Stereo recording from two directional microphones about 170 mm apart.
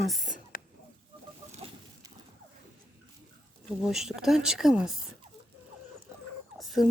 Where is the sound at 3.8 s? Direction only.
Centre (ahead or behind).